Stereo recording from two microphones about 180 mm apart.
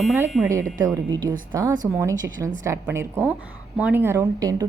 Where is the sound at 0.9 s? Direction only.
20° right (ahead or behind).